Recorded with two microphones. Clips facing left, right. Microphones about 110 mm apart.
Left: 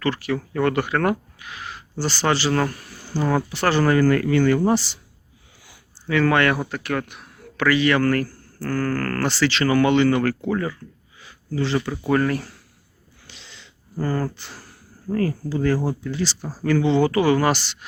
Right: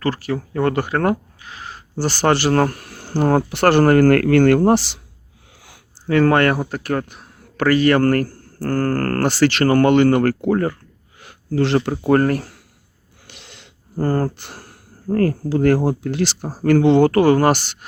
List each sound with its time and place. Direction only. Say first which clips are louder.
0.0 s speech: right 2 dB; 35° right (ahead or behind); by 4.9 s 70° right (ahead or behind)
6.1 s speech: right 4 dB; 45° right (ahead or behind)
11.2 s a sound: right 6 dB; 65° right (ahead or behind)
11.9 s speech: right 5 dB; 50° right (ahead or behind)
13.2 s snort: right 3 dB; 55° right (ahead or behind)
14.0 s speech: right 5 dB; 45° right (ahead or behind)